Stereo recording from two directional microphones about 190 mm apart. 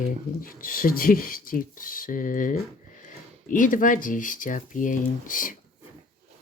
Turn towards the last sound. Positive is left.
turn(degrees=45)  # may be behind; listen again after turning